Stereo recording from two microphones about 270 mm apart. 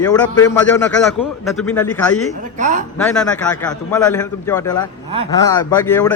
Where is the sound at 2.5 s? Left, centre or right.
Right.